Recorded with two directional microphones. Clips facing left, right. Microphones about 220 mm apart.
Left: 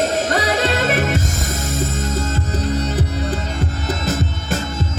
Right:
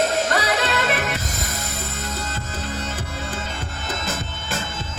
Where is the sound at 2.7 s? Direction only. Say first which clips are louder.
Left 10 dB; 40° left (ahead or behind).